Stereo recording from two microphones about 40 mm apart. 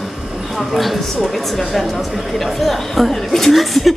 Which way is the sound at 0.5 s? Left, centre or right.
Centre.